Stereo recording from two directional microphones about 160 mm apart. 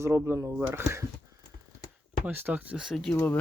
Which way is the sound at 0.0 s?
15° right (ahead or behind).